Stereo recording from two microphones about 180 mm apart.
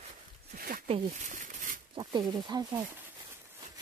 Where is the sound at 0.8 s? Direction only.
40° right (ahead or behind).